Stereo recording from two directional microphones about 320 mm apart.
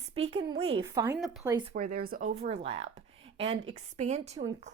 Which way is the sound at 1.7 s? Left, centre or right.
Right.